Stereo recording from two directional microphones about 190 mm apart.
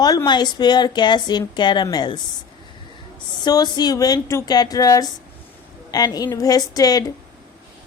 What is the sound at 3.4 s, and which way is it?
A woman's voice, 20° left (ahead or behind).